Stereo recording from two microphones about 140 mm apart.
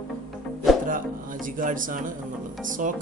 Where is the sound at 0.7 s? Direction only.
Centre (ahead or behind).